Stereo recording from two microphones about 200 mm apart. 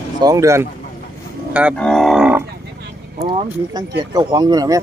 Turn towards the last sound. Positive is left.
turn(degrees=-20)  # may be behind; listen again after turning